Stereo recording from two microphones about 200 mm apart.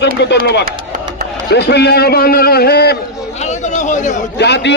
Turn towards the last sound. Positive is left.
turn(degrees=55)  # may be behind; listen again after turning